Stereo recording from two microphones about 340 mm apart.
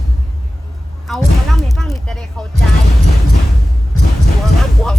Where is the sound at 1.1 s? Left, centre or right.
Centre.